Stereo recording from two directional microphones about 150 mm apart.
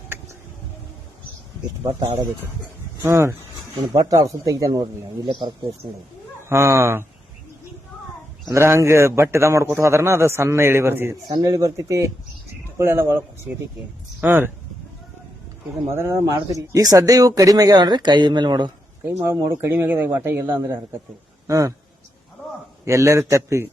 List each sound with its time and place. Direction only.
3.0 s a man's voice: 15° right (ahead or behind); by 5.5 s 35° right (ahead or behind)
6.5 s a man's voice: 15° right (ahead or behind)
8.4 s a man's voice: 20° right (ahead or behind)
11.3 s a man's voice: 25° right (ahead or behind)
15.9 s speech: 15° right (ahead or behind)
19.2 s a man's voice: 20° right (ahead or behind)
22.9 s speech: 20° right (ahead or behind)